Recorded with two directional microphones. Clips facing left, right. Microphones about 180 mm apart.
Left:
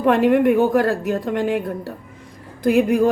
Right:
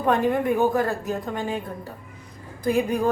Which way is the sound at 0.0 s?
80° left.